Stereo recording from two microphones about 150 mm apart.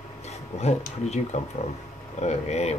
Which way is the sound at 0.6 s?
45° left (ahead or behind).